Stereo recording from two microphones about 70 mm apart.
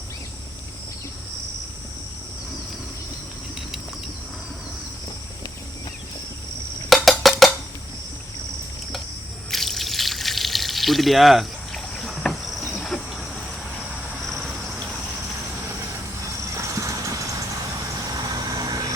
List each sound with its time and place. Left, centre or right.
6.9 s music: centre
9.5 s water: centre
12.2 s cricket: centre
14.3 s cricket: centre
16.6 s train: right
18.1 s vehicle: right